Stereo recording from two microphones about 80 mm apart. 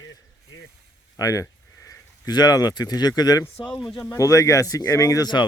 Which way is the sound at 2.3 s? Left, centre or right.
Left.